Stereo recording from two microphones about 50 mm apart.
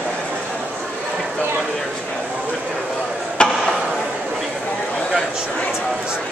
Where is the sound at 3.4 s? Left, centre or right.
Left.